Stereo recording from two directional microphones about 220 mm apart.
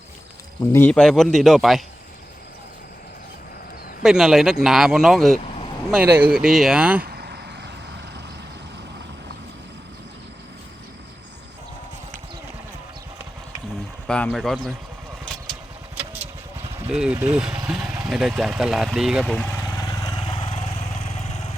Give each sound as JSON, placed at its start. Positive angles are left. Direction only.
{"t": 0.7, "sound": "speech", "side_deg": 10}
{"t": 4.0, "sound": "speech", "side_deg": 0}
{"t": 7.0, "sound": "vehicle", "side_deg": -45}
{"t": 14.1, "sound": "speech", "side_deg": 5}
{"t": 16.0, "sound": "vehicle", "side_deg": -10}
{"t": 16.8, "sound": "speech", "side_deg": -5}
{"t": 19.9, "sound": "vehicle", "side_deg": 20}